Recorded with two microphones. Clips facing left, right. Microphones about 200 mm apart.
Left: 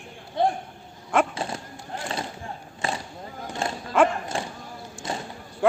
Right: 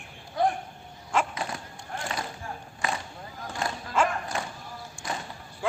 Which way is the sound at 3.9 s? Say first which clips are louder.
Left 6 dB; 60° left (ahead or behind).